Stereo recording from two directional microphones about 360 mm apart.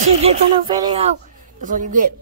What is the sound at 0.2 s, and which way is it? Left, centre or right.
A man's voice, centre.